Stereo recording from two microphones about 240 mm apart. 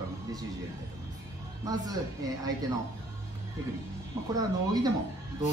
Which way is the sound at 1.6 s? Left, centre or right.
Centre.